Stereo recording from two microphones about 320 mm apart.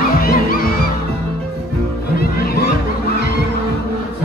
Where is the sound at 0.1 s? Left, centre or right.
Left.